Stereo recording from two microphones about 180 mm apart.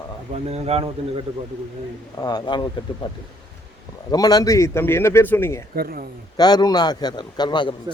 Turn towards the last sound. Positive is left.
turn(degrees=25)  # may be behind; listen again after turning